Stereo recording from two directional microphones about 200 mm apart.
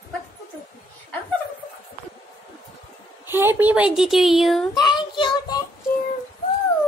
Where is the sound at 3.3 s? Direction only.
10° right (ahead or behind).